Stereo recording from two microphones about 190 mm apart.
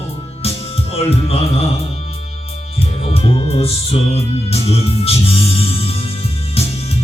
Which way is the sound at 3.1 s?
30° left (ahead or behind).